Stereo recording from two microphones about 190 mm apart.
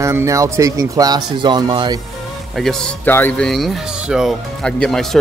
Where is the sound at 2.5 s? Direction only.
Centre (ahead or behind).